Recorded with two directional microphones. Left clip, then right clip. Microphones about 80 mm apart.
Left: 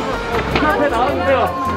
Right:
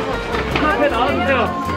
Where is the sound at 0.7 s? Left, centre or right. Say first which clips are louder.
Even; centre.